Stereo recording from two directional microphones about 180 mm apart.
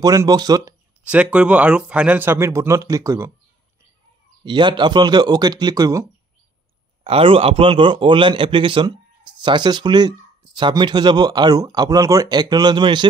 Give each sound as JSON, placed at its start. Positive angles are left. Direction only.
{"t": 0.0, "sound": "a man's voice", "side_deg": -20}
{"t": 1.0, "sound": "speech", "side_deg": -5}
{"t": 4.5, "sound": "a man's voice", "side_deg": -25}
{"t": 7.1, "sound": "a man's voice", "side_deg": -30}